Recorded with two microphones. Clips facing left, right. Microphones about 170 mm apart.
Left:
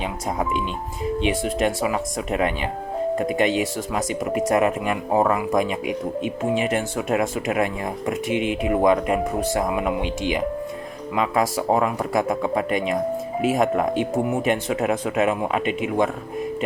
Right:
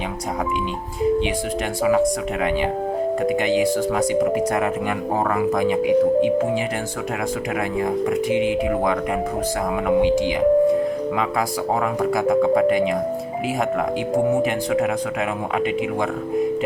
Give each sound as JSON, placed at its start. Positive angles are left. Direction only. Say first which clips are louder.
{"t": 3.2, "sound": "speech", "louder": "right 5 dB", "side_deg": 25}
{"t": 5.6, "sound": "speech", "louder": "right 8 dB", "side_deg": -25}
{"t": 7.1, "sound": "speech", "louder": "left 3 dB", "side_deg": 25}
{"t": 13.4, "sound": "speech", "louder": "left 3 dB", "side_deg": 25}